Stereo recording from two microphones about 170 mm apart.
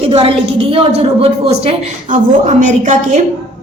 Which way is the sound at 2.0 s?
45° right (ahead or behind).